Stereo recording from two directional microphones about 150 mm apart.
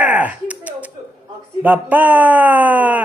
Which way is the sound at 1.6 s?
10° right (ahead or behind).